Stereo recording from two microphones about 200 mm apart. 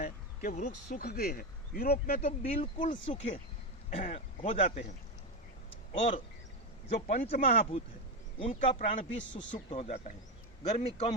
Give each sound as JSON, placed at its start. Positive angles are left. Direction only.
{"t": 0.0, "sound": "speech", "side_deg": 35}
{"t": 2.5, "sound": "speech", "side_deg": 35}
{"t": 3.1, "sound": "a man's voice", "side_deg": 30}
{"t": 5.9, "sound": "a man's voice", "side_deg": 30}
{"t": 8.4, "sound": "a man's voice", "side_deg": 30}